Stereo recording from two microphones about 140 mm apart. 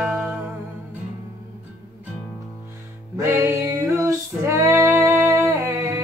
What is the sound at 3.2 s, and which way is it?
Music, 20° right (ahead or behind).